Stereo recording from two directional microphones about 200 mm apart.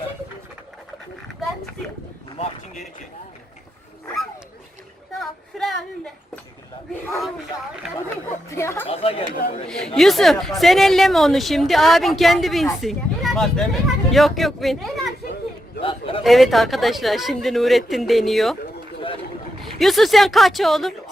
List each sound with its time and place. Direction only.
5.2 s a sound: centre (ahead or behind)
8.4 s speech: 15° left (ahead or behind)
8.9 s speech: 30° left (ahead or behind)
9.6 s a woman's voice: centre (ahead or behind)
15.8 s a sound: 25° left (ahead or behind)
16.2 s a woman's voice: centre (ahead or behind)
19.8 s a woman's voice: centre (ahead or behind)